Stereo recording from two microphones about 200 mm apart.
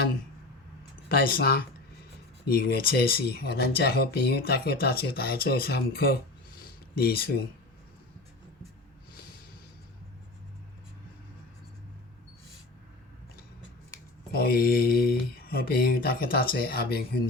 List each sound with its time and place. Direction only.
1.0 s speech: 50° left (ahead or behind)
6.6 s a sound: 50° left (ahead or behind)
14.3 s speech: 50° left (ahead or behind)